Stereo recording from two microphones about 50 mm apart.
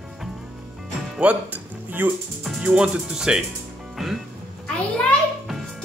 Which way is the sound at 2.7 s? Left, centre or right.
Centre.